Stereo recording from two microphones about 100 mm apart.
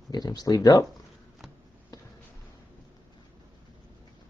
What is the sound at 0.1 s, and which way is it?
Speech, 45° left (ahead or behind).